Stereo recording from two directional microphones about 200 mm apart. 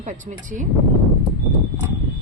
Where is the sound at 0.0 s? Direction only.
40° right (ahead or behind).